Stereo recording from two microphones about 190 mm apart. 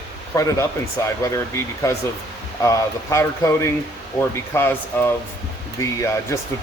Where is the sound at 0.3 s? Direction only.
15° left (ahead or behind).